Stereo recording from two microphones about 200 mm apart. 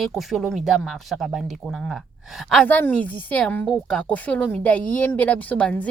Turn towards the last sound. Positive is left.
turn(degrees=5)  # may be behind; listen again after turning